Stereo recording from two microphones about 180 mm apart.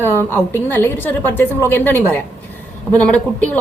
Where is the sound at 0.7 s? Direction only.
10° left (ahead or behind).